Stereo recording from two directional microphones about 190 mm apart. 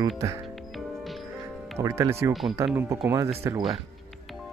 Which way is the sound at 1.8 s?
15° right (ahead or behind).